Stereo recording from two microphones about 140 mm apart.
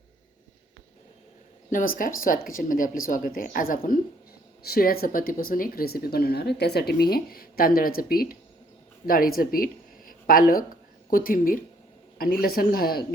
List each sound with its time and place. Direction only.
1.7 s speech: 80° left